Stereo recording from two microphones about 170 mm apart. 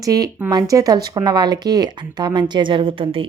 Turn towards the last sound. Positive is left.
turn(degrees=-30)  # may be behind; listen again after turning